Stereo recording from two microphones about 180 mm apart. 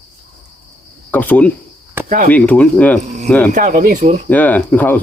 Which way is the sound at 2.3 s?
10° left (ahead or behind).